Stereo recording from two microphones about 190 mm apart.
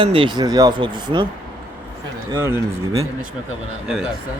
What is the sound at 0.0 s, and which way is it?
Speech, 25° right (ahead or behind).